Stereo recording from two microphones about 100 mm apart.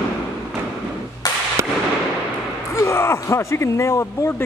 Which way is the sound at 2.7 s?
30° left (ahead or behind).